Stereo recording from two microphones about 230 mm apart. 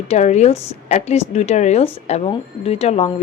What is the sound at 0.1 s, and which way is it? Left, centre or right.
A woman's voice, left.